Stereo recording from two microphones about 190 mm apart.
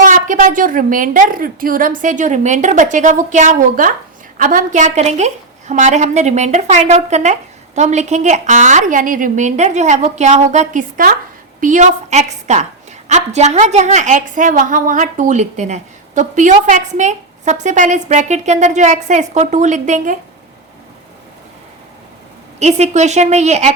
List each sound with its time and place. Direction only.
0.0 s a woman's voice: 45° right (ahead or behind)
22.6 s a woman's voice: 35° right (ahead or behind)